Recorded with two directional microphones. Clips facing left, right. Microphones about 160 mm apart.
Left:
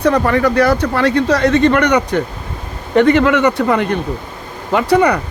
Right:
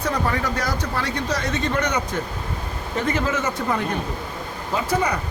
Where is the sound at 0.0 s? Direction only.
70° left (ahead or behind).